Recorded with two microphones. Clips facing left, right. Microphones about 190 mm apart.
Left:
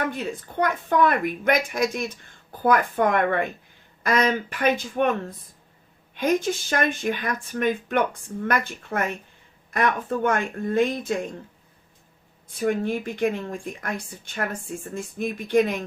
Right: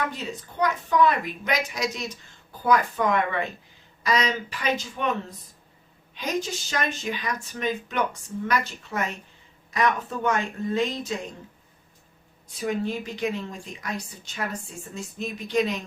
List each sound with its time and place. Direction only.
0.0 s speech: 55° left (ahead or behind)
6.1 s speech: 55° left (ahead or behind)
12.5 s speech: 55° left (ahead or behind)